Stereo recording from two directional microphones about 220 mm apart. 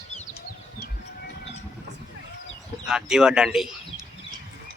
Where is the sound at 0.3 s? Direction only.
45° left (ahead or behind).